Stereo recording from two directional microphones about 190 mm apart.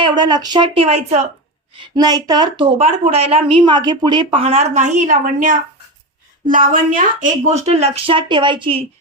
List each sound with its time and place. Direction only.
0.0 s a woman's voice: 20° right (ahead or behind)
1.7 s a woman's voice: 25° right (ahead or behind)